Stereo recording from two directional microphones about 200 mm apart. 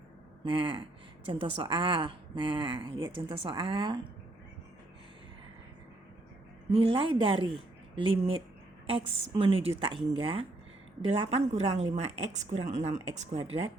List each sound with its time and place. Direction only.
0.4 s a woman's voice: 25° right (ahead or behind)
6.7 s a woman's voice: 30° right (ahead or behind)